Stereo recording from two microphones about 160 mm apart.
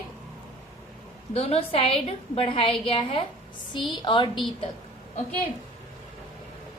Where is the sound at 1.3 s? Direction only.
40° left (ahead or behind).